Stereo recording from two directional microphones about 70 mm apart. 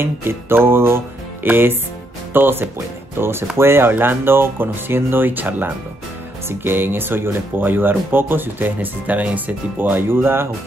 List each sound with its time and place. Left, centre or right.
0.0 s speech: right